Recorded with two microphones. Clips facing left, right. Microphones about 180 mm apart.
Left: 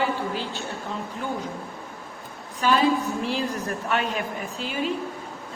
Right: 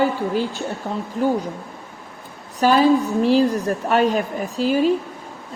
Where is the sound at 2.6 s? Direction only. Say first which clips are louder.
Right 6 dB; 40° right (ahead or behind).